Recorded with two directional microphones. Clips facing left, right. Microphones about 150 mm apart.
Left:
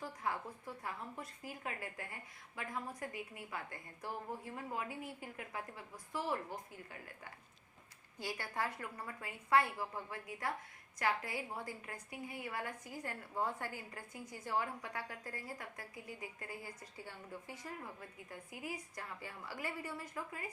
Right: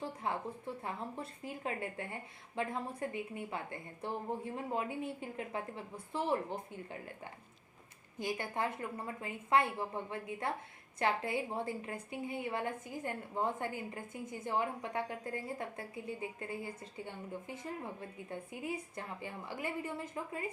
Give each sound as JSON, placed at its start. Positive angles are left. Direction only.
{"t": 0.0, "sound": "a woman's voice", "side_deg": -25}
{"t": 8.2, "sound": "a woman's voice", "side_deg": -20}